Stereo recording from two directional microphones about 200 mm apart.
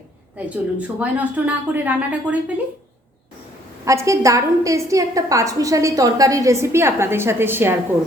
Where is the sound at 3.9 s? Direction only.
15° right (ahead or behind).